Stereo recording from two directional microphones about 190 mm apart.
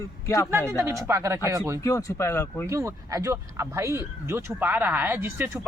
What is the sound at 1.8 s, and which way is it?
Speech, 15° left (ahead or behind).